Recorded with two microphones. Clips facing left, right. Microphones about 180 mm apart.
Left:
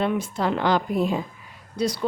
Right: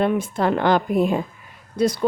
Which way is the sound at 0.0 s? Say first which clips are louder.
Right 4 dB; 50° right (ahead or behind).